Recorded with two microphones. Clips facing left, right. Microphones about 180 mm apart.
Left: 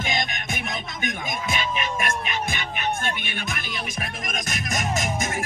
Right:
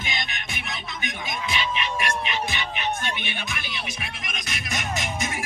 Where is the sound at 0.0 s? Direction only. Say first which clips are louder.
Left 5 dB; 45° left (ahead or behind).